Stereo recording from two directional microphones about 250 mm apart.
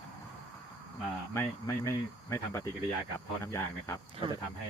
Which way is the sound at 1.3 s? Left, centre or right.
Centre.